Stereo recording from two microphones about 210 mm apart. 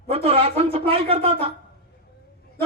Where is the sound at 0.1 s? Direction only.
30° right (ahead or behind).